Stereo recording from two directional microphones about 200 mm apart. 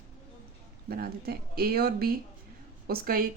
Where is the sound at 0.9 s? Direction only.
50° right (ahead or behind).